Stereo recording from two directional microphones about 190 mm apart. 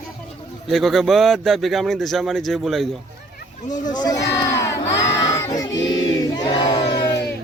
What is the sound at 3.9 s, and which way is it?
Speech, 20° left (ahead or behind).